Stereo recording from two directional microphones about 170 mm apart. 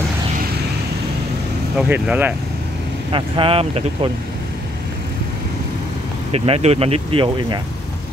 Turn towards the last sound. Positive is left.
turn(degrees=-30)  # may be behind; listen again after turning